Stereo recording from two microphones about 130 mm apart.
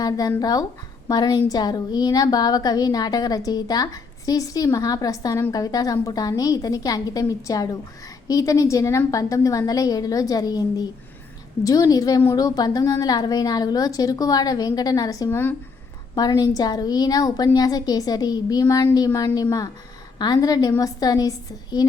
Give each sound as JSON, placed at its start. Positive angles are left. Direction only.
{"t": 0.0, "sound": "a woman's voice", "side_deg": 25}
{"t": 16.1, "sound": "a woman's voice", "side_deg": 30}